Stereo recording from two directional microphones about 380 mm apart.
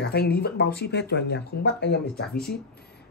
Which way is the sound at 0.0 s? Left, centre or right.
Left.